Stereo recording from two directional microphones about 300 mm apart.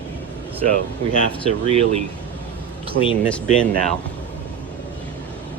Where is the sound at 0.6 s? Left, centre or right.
Right.